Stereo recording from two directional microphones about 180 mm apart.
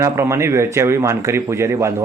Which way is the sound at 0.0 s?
15° right (ahead or behind).